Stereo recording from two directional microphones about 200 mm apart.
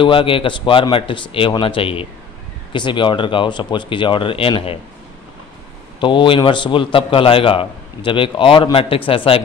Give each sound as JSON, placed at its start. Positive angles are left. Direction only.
{"t": 0.0, "sound": "a man's voice", "side_deg": 25}
{"t": 5.9, "sound": "a man's voice", "side_deg": 25}